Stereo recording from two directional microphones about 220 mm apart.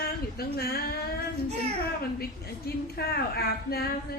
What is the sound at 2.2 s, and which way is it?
Speech, 45° left (ahead or behind).